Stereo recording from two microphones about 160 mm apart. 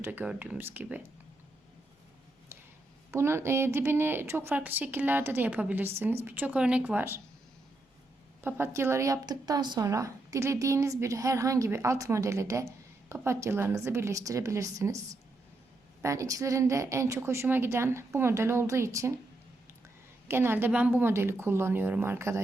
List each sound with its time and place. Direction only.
0.0 s a woman's voice: 10° right (ahead or behind)
3.1 s a woman's voice: 15° right (ahead or behind)
8.4 s a woman's voice: 15° right (ahead or behind)
20.2 s a woman's voice: 15° right (ahead or behind)